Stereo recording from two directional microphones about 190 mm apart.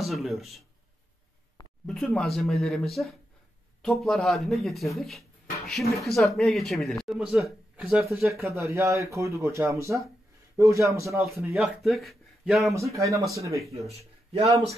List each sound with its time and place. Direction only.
0.0 s speech: centre (ahead or behind)
1.9 s speech: centre (ahead or behind); by 11.2 s 15° right (ahead or behind)
11.5 s speech: centre (ahead or behind)
12.7 s speech: 15° right (ahead or behind)
13.8 s a man's voice: 35° right (ahead or behind)